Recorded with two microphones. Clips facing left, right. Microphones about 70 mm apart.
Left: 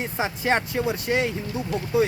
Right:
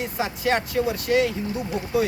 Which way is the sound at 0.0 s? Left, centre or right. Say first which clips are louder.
Right 1 dB; left.